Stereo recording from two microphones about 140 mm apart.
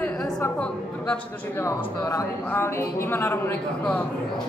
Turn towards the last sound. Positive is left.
turn(degrees=15)  # may be behind; listen again after turning